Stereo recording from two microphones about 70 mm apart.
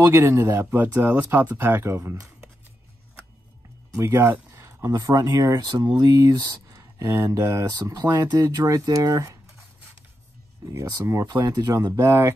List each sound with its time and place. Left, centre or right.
0.0 s speech: right
3.9 s a sound: right
5.0 s speech: right
8.0 s speech: right
10.9 s speech: right